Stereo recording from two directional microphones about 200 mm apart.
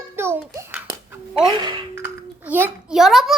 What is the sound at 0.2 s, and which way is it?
Babbling, 10° right (ahead or behind).